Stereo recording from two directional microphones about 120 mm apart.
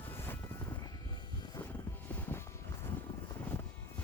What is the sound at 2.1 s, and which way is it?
Music, 20° left (ahead or behind).